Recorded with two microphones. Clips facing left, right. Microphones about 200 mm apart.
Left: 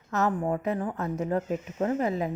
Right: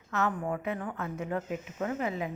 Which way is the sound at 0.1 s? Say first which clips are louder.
Left 4 dB; 40° left (ahead or behind).